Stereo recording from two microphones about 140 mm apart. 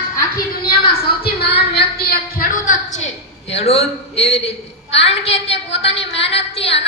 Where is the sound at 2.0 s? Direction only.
90° left; by 3.0 s 65° left (ahead or behind).